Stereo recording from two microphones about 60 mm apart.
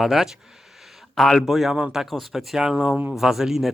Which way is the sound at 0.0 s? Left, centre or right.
Centre.